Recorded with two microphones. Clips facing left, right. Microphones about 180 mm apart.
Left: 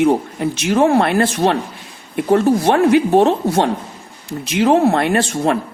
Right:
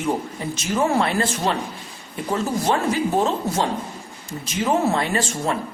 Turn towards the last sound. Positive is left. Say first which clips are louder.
# left 7 dB
turn(degrees=65)  # may be behind; listen again after turning